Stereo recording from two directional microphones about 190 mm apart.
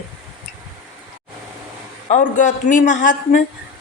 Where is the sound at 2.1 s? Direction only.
40° left (ahead or behind).